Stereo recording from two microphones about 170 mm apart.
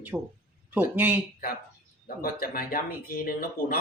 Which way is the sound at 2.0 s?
60° left (ahead or behind).